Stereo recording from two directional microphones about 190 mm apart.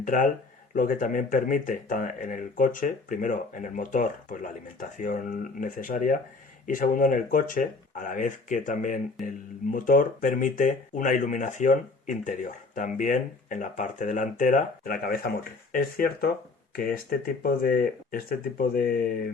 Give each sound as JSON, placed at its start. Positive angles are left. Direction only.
{"t": 0.0, "sound": "speech", "side_deg": 45}